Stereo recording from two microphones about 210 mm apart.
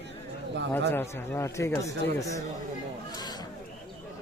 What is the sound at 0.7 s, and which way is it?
Speech, 10° left (ahead or behind).